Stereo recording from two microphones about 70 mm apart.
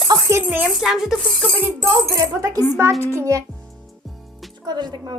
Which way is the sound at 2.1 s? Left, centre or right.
Right.